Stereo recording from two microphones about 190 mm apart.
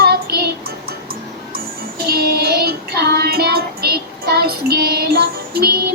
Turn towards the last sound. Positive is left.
turn(degrees=-55)  # may be behind; listen again after turning